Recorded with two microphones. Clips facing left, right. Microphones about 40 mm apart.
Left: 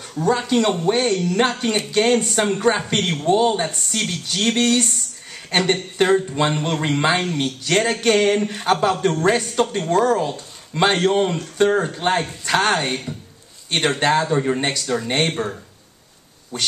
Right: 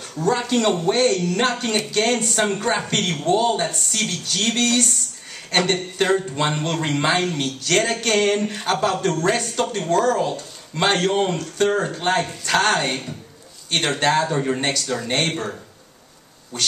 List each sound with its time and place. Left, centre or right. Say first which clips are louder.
0.1 s speech: left 2 dB; centre
3.2 s speech: left 2 dB; centre
6.3 s speech: left 2 dB; centre
16.5 s speech: even; centre